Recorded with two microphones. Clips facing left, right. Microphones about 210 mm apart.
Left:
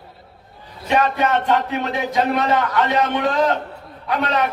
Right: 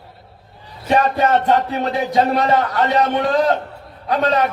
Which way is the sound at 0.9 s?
35° right (ahead or behind).